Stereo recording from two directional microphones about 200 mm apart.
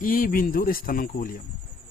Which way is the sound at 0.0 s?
45° left (ahead or behind).